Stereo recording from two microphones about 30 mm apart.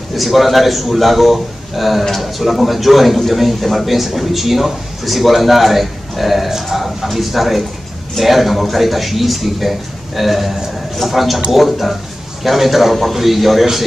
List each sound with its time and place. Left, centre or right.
0.1 s a man's voice: centre